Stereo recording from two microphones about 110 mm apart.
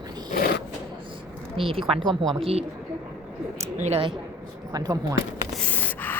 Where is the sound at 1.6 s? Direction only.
55° right (ahead or behind).